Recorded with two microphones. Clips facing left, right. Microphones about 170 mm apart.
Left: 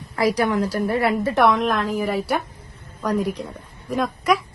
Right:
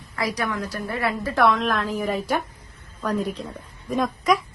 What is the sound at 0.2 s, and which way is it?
A woman's voice, 25° left (ahead or behind).